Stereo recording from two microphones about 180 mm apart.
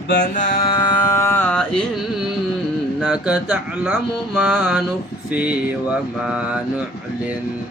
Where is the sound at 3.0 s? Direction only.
5° right (ahead or behind).